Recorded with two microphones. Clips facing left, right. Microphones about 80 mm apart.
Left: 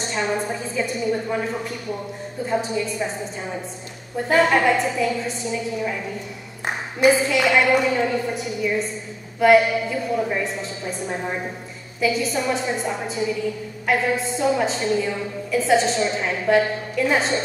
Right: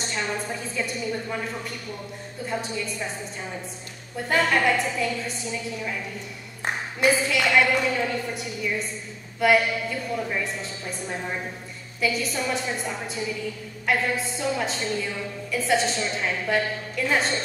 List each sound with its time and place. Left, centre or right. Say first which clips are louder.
0.0 s a sound: left 5 dB; centre
0.5 s a woman's voice: left 5 dB; centre
4.2 s a woman's voice: left 5 dB; centre
12.0 s a woman's voice: left 4 dB; centre